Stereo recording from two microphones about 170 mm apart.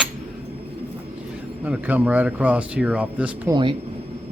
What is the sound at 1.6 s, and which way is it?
Speech, 10° right (ahead or behind).